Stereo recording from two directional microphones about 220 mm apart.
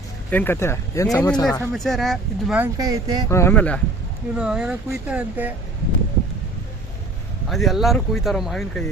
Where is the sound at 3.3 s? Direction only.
10° left (ahead or behind).